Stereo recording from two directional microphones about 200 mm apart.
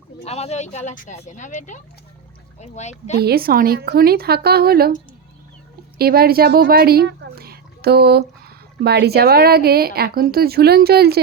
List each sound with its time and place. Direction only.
0.3 s speech: 30° left (ahead or behind)
3.2 s speech: 50° right (ahead or behind)
6.0 s speech: 50° right (ahead or behind)